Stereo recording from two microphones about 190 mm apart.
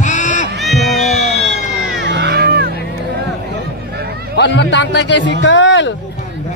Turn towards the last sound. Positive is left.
turn(degrees=75)  # may be behind; listen again after turning